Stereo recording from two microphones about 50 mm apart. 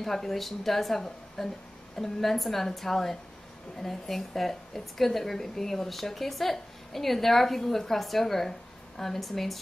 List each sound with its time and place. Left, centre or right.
0.0 s a woman's voice: centre